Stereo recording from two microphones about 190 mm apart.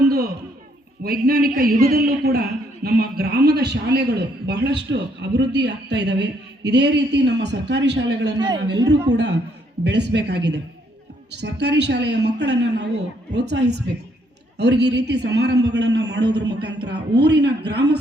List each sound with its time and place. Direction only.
1.0 s a man's voice: 50° right (ahead or behind)
8.4 s a man's voice: 20° right (ahead or behind)
9.1 s a man's voice: 65° right (ahead or behind)